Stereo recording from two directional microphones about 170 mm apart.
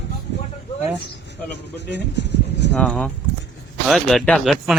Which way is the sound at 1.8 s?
90° left.